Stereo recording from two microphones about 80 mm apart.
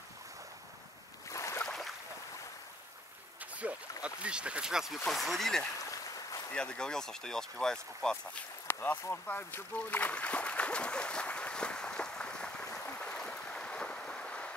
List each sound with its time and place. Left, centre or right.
1.3 s boat: left
3.5 s speech: centre
8.6 s boat: left